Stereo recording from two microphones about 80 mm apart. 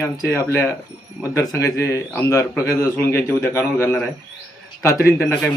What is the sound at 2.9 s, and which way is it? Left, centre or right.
A man's voice, left.